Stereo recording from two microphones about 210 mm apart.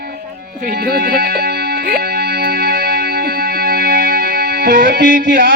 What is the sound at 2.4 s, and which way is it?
Music, 45° right (ahead or behind).